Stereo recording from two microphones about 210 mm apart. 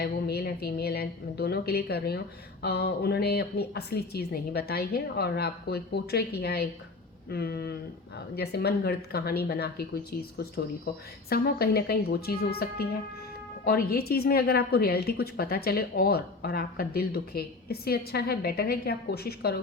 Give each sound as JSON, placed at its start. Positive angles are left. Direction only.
{"t": 0.0, "sound": "speech", "side_deg": 50}